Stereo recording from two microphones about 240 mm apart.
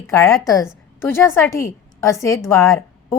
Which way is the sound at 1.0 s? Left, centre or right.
Centre.